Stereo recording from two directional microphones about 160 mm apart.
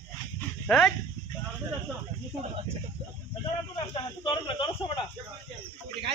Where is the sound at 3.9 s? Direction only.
30° left (ahead or behind).